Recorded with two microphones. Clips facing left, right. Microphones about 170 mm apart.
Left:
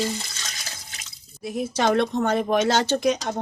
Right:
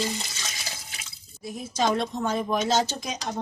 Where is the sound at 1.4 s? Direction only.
70° left (ahead or behind).